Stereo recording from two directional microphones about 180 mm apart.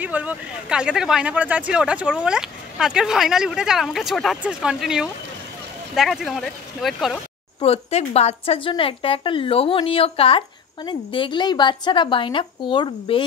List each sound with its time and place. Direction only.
0.0 s speech: 10° right (ahead or behind)
7.6 s a woman's voice: 35° left (ahead or behind)